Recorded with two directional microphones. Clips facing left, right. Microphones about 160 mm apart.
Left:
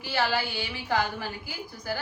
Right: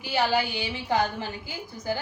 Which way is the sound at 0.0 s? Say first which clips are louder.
Right 3 dB; 15° right (ahead or behind).